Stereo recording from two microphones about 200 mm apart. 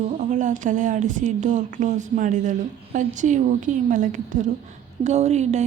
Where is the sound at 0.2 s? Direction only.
40° right (ahead or behind).